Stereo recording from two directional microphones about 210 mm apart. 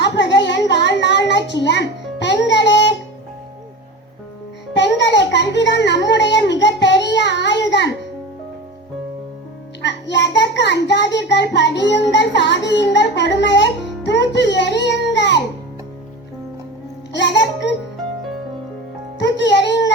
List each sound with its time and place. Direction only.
0.0 s a sound: 55° left (ahead or behind)
1.3 s music: 55° left (ahead or behind)
4.7 s child singing: 55° left (ahead or behind)
9.8 s child singing: 55° left (ahead or behind)
17.1 s music: 55° left (ahead or behind)
19.2 s a child's voice: 55° left (ahead or behind)